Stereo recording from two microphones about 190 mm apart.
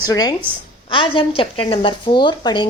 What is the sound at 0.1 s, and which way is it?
A woman's voice, 20° left (ahead or behind).